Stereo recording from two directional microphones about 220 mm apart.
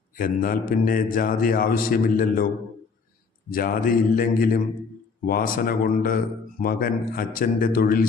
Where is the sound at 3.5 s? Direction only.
40° left (ahead or behind).